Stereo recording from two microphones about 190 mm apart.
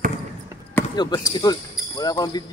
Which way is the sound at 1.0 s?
20° left (ahead or behind).